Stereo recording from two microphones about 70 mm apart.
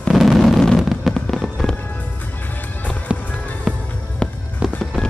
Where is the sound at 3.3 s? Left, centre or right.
Left.